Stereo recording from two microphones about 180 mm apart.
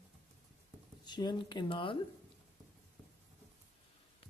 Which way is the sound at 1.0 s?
25° left (ahead or behind).